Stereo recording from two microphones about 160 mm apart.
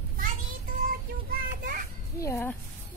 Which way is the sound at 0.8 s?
60° right (ahead or behind).